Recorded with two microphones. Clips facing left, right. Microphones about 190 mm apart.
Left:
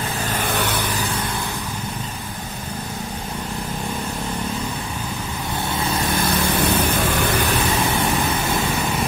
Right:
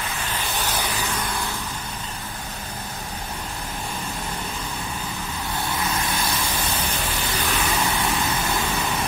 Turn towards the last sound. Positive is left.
turn(degrees=55)  # may be behind; listen again after turning